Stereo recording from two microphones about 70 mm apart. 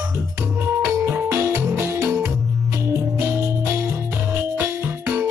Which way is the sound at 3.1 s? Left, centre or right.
Right.